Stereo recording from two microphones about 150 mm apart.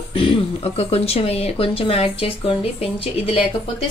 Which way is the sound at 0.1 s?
35° left (ahead or behind).